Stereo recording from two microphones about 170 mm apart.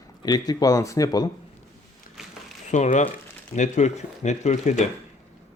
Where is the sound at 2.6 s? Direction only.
45° left (ahead or behind).